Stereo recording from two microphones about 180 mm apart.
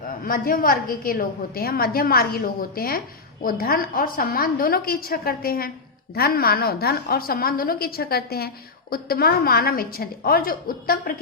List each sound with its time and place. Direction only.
0.3 s a woman's voice: 50° left (ahead or behind)